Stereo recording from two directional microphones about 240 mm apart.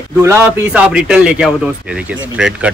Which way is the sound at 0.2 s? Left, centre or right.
Centre.